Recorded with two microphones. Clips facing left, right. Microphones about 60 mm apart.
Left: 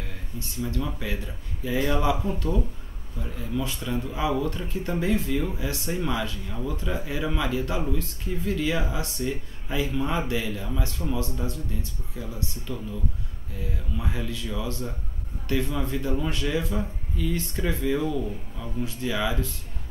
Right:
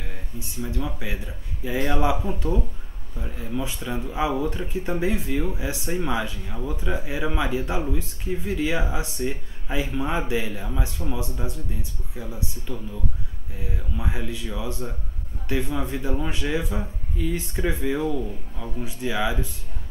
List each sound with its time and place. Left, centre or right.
0.4 s speech: centre